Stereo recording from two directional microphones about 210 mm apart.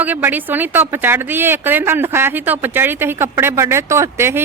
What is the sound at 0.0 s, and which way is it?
A woman's voice, 10° right (ahead or behind).